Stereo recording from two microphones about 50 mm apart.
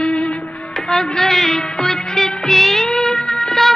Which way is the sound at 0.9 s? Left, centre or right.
Centre.